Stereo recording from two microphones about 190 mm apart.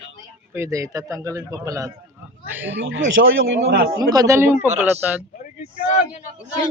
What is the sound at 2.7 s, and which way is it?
Speech, 80° right.